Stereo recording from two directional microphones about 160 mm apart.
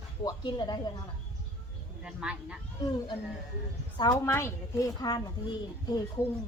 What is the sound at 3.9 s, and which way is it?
A woman's voice, 25° left (ahead or behind).